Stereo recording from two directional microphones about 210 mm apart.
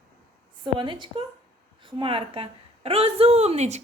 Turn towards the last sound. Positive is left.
turn(degrees=-30)  # may be behind; listen again after turning